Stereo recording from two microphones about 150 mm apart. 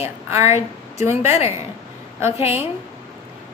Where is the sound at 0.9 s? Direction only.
15° right (ahead or behind).